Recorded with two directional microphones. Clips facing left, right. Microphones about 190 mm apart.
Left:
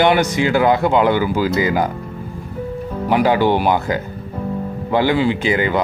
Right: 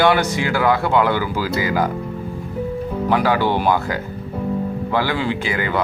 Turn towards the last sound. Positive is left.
turn(degrees=20)  # may be behind; listen again after turning